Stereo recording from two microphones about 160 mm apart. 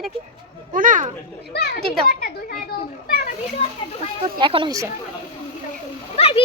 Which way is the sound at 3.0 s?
65° left (ahead or behind).